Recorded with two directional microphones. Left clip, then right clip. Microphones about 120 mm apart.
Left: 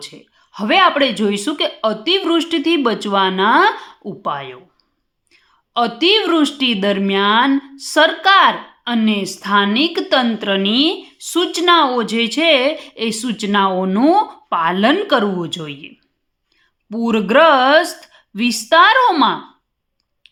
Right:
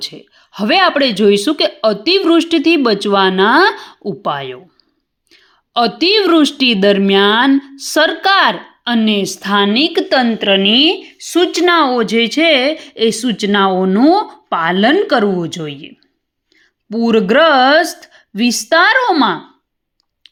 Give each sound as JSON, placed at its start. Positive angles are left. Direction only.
{"t": 0.0, "sound": "a woman's voice", "side_deg": -40}
{"t": 7.5, "sound": "speech", "side_deg": -35}
{"t": 9.6, "sound": "speech", "side_deg": -30}
{"t": 11.6, "sound": "speech", "side_deg": -40}
{"t": 11.9, "sound": "speech", "side_deg": -25}
{"t": 14.5, "sound": "speech", "side_deg": -35}
{"t": 18.0, "sound": "a sound", "side_deg": -25}
{"t": 18.7, "sound": "speech", "side_deg": -30}
{"t": 18.9, "sound": "speech", "side_deg": -20}